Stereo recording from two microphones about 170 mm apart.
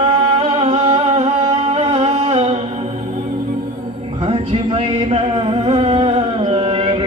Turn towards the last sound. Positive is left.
turn(degrees=-30)  # may be behind; listen again after turning